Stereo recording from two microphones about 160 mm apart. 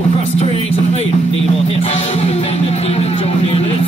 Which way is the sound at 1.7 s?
40° left (ahead or behind).